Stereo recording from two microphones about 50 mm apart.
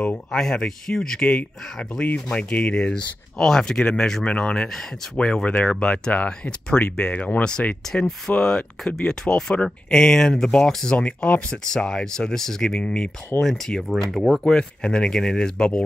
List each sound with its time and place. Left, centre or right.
0.3 s speech: centre; by 7.2 s left
8.4 s speech: centre
11.5 s speech: centre
14.4 s speech: centre